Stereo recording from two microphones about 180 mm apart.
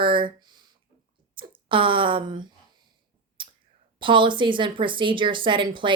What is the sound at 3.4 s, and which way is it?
Clicking, 30° right (ahead or behind).